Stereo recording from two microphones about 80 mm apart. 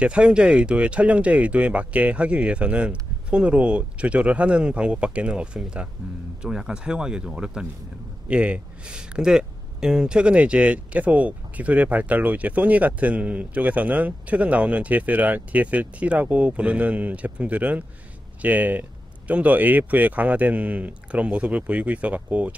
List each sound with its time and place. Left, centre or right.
0.0 s speech: centre